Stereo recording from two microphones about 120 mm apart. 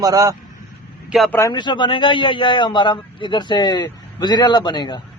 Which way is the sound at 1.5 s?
40° left (ahead or behind).